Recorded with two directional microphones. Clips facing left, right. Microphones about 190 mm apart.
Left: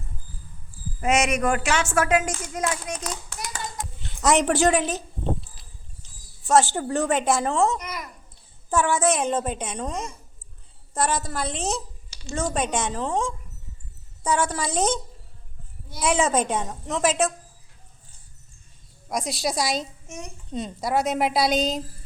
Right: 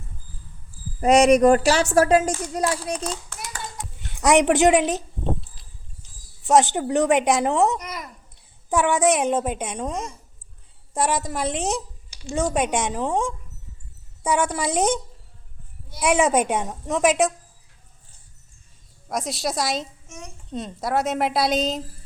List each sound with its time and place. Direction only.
1.0 s a child's voice: 35° right (ahead or behind)
4.1 s a woman's voice: 15° right (ahead or behind)
6.4 s a woman's voice: 20° right (ahead or behind)
19.0 s a woman's voice: centre (ahead or behind)
20.1 s a child's voice: 10° left (ahead or behind)
20.5 s a woman's voice: centre (ahead or behind)